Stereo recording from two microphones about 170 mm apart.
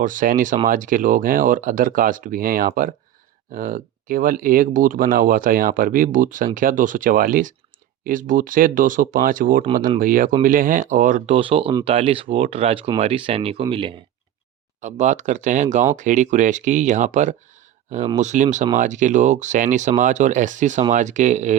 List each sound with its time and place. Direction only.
0.0 s speech: 50° right (ahead or behind)
11.3 s speech: 30° right (ahead or behind)
14.8 s speech: 45° right (ahead or behind)